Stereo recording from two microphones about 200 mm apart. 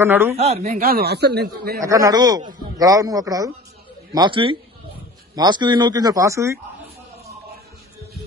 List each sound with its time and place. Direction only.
0.0 s a man's voice: 10° right (ahead or behind)
0.4 s speech: 35° right (ahead or behind)
0.7 s speech: 50° right (ahead or behind)
1.8 s a man's voice: 15° right (ahead or behind)